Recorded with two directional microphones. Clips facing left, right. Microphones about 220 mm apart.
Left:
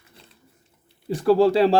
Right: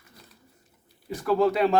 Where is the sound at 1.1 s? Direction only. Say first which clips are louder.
Left 6 dB; 30° left (ahead or behind).